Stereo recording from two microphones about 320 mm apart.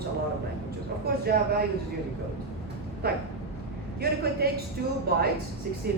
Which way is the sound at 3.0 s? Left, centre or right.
Right.